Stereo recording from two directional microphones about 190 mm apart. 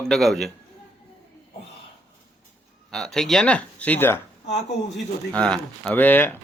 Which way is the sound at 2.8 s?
5° left (ahead or behind).